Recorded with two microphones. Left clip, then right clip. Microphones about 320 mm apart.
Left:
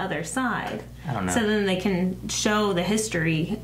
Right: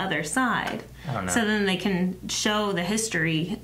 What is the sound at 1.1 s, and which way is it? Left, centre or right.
Speech, right.